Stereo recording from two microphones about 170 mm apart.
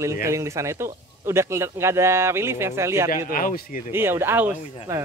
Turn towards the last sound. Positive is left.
turn(degrees=-10)  # may be behind; listen again after turning